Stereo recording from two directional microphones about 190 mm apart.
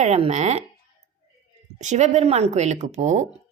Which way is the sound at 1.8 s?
40° right (ahead or behind).